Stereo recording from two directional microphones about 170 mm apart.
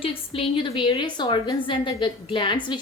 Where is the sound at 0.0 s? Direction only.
35° left (ahead or behind).